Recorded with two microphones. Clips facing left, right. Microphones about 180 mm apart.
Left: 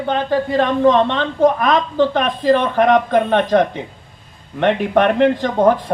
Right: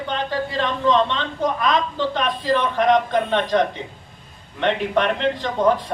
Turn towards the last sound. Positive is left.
turn(degrees=50)  # may be behind; listen again after turning